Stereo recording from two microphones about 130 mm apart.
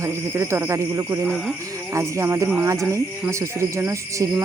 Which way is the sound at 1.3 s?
Centre (ahead or behind).